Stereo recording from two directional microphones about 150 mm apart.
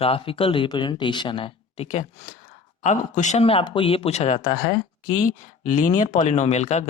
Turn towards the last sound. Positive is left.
turn(degrees=45)  # may be behind; listen again after turning